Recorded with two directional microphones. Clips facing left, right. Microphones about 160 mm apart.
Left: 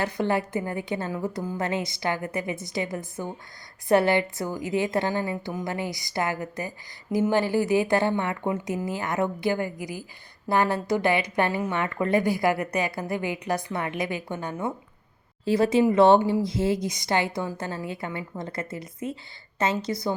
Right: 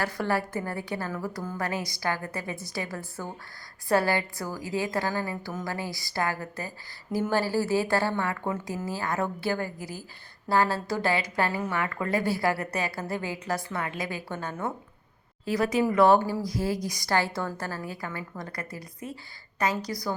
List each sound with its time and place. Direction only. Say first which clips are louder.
0.0 s a woman's voice: left 3 dB; 20° left (ahead or behind)
15.4 s a woman's voice: left 5 dB; 25° left (ahead or behind)